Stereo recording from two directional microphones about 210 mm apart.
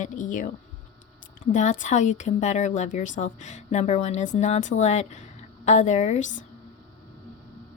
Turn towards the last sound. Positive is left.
turn(degrees=35)  # may be behind; listen again after turning